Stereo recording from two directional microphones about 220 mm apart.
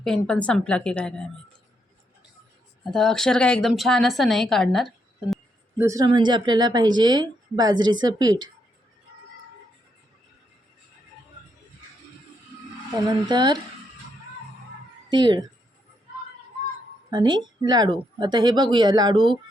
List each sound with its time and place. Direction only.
0.0 s a woman's voice: 5° left (ahead or behind)
2.9 s a woman's voice: centre (ahead or behind)
5.3 s speech: 10° right (ahead or behind)
12.9 s speech: 15° right (ahead or behind)
15.1 s speech: 20° right (ahead or behind)
17.1 s speech: 20° right (ahead or behind)